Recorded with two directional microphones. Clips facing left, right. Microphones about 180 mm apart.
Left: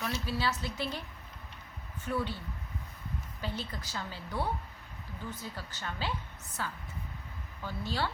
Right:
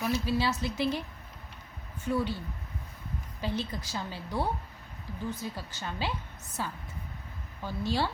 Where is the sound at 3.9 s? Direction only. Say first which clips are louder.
Right 3 dB; 15° right (ahead or behind).